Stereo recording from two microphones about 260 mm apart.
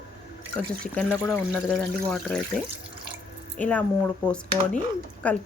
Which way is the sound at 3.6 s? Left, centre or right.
Centre.